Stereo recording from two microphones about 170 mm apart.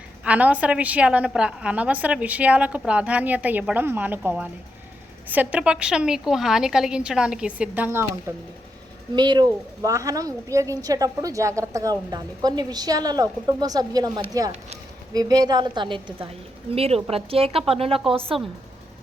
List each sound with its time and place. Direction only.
0.3 s a woman's voice: 10° right (ahead or behind)
9.1 s a woman's voice: 25° right (ahead or behind)